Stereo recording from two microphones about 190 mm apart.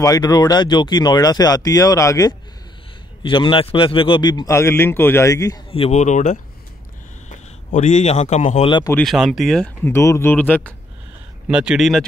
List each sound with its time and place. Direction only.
0.0 s speech: 20° left (ahead or behind)
5.7 s speech: 35° left (ahead or behind)
8.6 s speech: 25° left (ahead or behind)
8.9 s speech: centre (ahead or behind)
11.4 s speech: 5° right (ahead or behind)